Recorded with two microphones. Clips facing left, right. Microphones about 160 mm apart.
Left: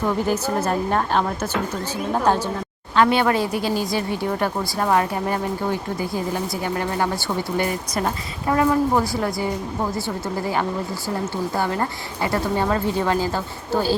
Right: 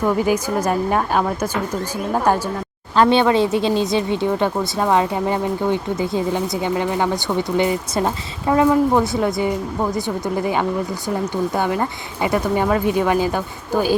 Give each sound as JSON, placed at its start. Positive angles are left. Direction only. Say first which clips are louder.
{"t": 0.2, "sound": "a woman's voice", "louder": "right 3 dB", "side_deg": -10}
{"t": 2.9, "sound": "a woman's voice", "louder": "right 3 dB", "side_deg": -30}